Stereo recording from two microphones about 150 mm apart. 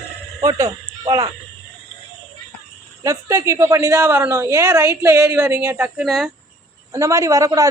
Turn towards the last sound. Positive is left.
turn(degrees=-25)  # may be behind; listen again after turning